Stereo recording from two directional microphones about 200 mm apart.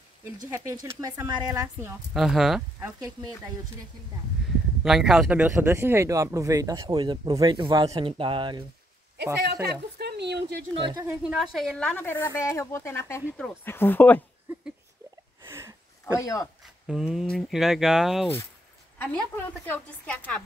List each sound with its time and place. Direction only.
0.5 s speech: 15° right (ahead or behind)
2.1 s speech: centre (ahead or behind)
4.8 s speech: 5° right (ahead or behind); by 8.6 s 25° right (ahead or behind)
9.2 s speech: 55° right (ahead or behind)
10.7 s speech: 25° right (ahead or behind)
11.1 s a woman's voice: 5° right (ahead or behind)
15.4 s a sound: 15° right (ahead or behind)
16.2 s a woman's voice: 15° left (ahead or behind)
16.8 s speech: 5° right (ahead or behind)
18.9 s a woman's voice: 10° left (ahead or behind)